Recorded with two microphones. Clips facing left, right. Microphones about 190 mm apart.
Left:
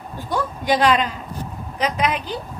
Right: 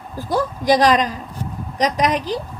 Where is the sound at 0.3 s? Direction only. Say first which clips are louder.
Right 4 dB; 35° right (ahead or behind).